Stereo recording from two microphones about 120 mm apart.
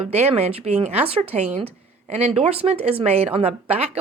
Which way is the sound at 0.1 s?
60° right (ahead or behind).